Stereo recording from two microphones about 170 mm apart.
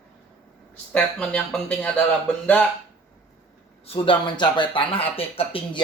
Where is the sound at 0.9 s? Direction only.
5° left (ahead or behind).